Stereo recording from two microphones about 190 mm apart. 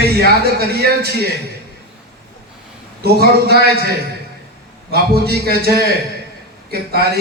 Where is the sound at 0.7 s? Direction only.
55° right (ahead or behind).